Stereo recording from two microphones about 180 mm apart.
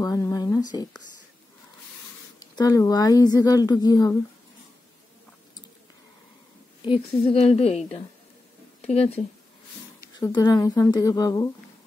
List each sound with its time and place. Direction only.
0.0 s a sound: 20° left (ahead or behind)
2.5 s a woman's voice: 20° left (ahead or behind)
7.3 s a woman's voice: 35° left (ahead or behind)
8.8 s a woman's voice: 35° left (ahead or behind)
10.2 s a woman's voice: 20° left (ahead or behind)